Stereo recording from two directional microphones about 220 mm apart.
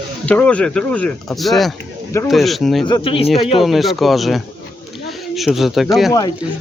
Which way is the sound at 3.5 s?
Centre (ahead or behind).